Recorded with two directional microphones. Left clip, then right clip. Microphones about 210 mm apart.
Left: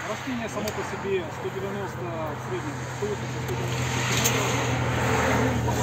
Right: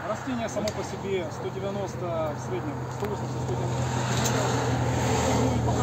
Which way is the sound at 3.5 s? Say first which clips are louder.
Left 2 dB; 35° right (ahead or behind).